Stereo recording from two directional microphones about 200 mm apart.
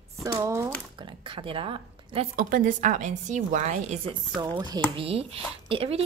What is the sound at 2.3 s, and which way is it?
Speech, 45° right (ahead or behind).